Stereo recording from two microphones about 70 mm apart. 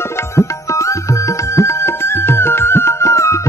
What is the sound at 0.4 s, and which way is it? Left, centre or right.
Music, left.